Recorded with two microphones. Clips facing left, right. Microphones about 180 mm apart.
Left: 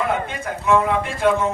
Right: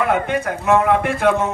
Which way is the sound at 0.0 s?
65° right (ahead or behind).